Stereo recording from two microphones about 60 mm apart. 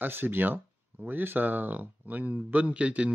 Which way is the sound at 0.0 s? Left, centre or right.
Right.